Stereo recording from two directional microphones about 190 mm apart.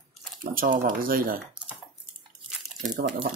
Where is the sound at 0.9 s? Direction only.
50° right (ahead or behind).